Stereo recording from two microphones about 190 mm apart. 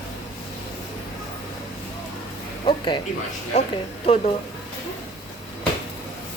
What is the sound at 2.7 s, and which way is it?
Music, 25° left (ahead or behind).